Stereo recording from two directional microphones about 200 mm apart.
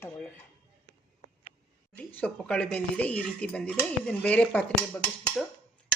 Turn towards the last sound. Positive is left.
turn(degrees=5)  # may be behind; listen again after turning